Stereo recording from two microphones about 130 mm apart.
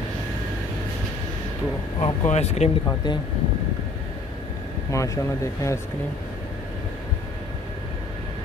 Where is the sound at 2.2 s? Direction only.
55° left (ahead or behind).